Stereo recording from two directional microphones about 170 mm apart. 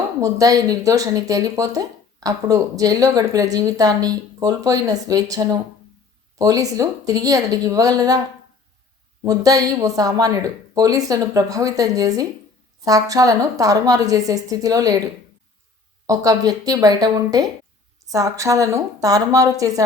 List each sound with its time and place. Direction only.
0.2 s speech: 20° right (ahead or behind)
9.2 s speech: 20° right (ahead or behind)
16.0 s speech: 20° right (ahead or behind)